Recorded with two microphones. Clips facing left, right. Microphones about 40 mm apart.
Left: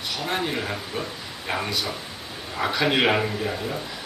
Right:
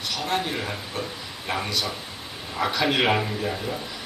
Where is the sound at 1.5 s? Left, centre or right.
Centre.